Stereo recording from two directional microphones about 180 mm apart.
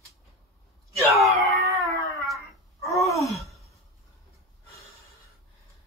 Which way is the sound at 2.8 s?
15° left (ahead or behind).